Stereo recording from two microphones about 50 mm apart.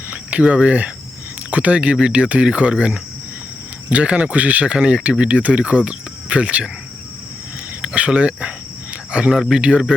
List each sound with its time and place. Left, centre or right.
0.4 s speech: right
7.8 s speech: right
9.3 s speech: centre
9.6 s speech: right